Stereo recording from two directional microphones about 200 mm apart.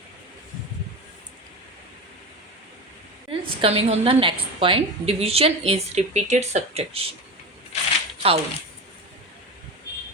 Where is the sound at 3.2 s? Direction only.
30° right (ahead or behind).